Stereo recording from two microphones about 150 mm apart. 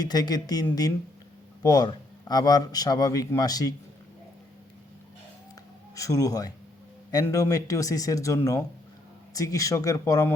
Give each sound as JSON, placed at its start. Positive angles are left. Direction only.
{"t": 0.0, "sound": "a man's voice", "side_deg": 25}
{"t": 5.9, "sound": "a man's voice", "side_deg": 20}